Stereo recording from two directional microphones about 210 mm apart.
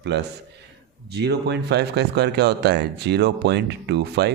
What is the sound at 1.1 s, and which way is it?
Speech, 50° right (ahead or behind).